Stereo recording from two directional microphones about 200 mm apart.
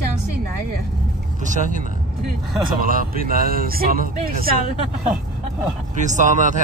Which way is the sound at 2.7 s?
45° right (ahead or behind).